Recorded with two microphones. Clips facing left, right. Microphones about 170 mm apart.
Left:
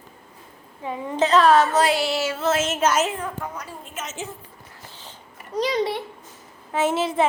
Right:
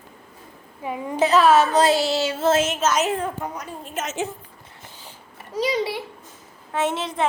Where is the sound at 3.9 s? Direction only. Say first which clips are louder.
Right 7 dB; 65° right (ahead or behind).